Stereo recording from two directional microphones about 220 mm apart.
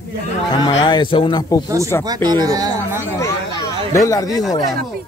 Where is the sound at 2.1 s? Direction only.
20° right (ahead or behind).